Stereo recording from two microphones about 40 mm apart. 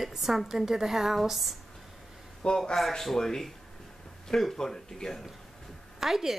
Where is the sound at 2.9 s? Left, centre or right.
Centre.